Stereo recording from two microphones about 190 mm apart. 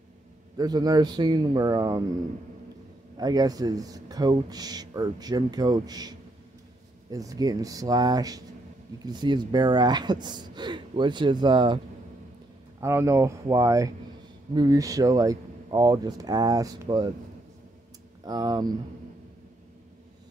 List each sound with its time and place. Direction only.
0.6 s speech: 20° right (ahead or behind)
3.2 s speech: 20° right (ahead or behind)
12.8 s speech: 15° right (ahead or behind)
18.2 s speech: 20° right (ahead or behind)